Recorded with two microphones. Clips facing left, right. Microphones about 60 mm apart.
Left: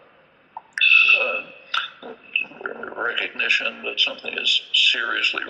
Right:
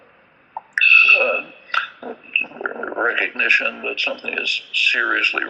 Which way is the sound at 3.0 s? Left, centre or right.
Right.